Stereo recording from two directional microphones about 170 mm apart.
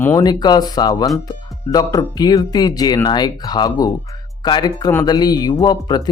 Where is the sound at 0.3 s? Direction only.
25° left (ahead or behind).